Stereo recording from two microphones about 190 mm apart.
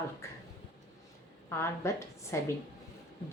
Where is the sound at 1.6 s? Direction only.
15° left (ahead or behind).